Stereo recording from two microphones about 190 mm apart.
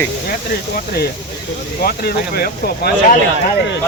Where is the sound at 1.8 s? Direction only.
55° left (ahead or behind).